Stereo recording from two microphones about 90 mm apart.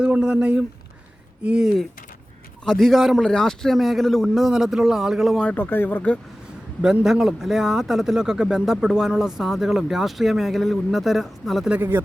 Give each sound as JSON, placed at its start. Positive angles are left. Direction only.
{"t": 0.0, "sound": "speech", "side_deg": -10}
{"t": 5.5, "sound": "speech", "side_deg": 20}
{"t": 6.8, "sound": "speech", "side_deg": -5}
{"t": 11.7, "sound": "speech", "side_deg": -20}